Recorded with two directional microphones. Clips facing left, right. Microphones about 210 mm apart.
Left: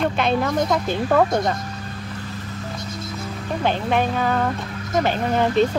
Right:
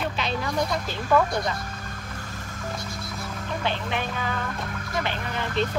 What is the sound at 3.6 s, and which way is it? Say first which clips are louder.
Speech: left 9 dB; 45° left (ahead or behind).